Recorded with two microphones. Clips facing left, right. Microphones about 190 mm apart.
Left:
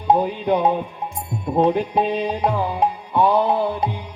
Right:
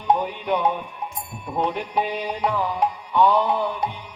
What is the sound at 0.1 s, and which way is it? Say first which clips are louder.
Music: left 4 dB; 30° left (ahead or behind).